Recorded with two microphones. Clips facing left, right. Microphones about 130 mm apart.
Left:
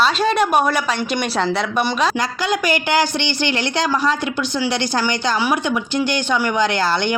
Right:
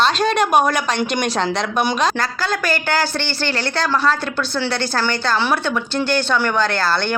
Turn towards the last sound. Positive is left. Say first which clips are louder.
# left 1 dB
turn(degrees=15)  # may be behind; listen again after turning